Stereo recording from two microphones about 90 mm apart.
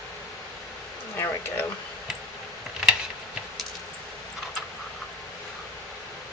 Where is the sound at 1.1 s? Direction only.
30° left (ahead or behind).